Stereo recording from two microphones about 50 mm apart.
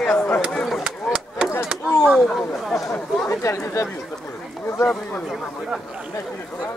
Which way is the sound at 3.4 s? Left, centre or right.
Left.